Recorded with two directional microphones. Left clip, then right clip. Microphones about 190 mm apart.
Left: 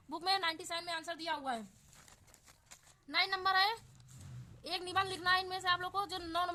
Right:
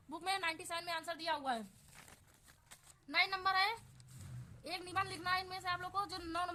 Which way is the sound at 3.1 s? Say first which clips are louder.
Left 2 dB; 20° left (ahead or behind).